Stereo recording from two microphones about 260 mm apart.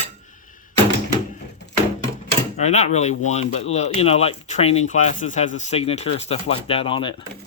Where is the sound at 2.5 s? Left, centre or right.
Left.